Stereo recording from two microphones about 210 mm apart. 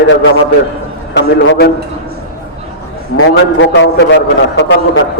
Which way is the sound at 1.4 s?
65° left (ahead or behind).